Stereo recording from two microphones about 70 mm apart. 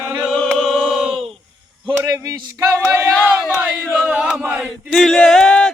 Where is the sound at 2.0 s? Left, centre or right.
Right.